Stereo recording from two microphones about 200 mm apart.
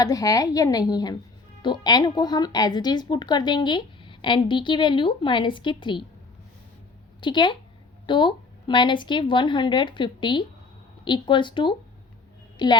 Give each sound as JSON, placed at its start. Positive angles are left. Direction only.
{"t": 0.0, "sound": "a woman's voice", "side_deg": 20}
{"t": 7.2, "sound": "a woman's voice", "side_deg": 25}